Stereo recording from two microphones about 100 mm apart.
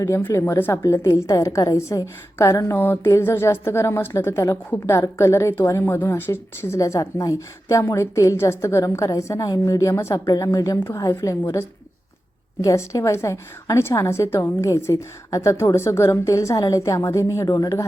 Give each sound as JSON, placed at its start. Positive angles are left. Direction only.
{"t": 0.2, "sound": "a woman's voice", "side_deg": 20}
{"t": 12.6, "sound": "a woman's voice", "side_deg": 30}